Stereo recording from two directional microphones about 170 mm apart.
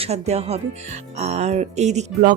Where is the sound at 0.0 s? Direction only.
40° right (ahead or behind).